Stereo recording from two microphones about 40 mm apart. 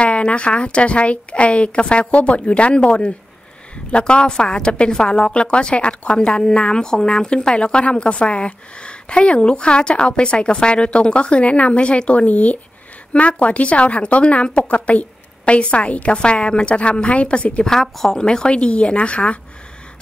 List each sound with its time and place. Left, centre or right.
0.0 s a woman's voice: left
17.6 s speech: centre
18.2 s a woman's voice: left